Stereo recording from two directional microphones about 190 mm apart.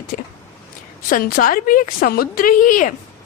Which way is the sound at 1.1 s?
45° left (ahead or behind).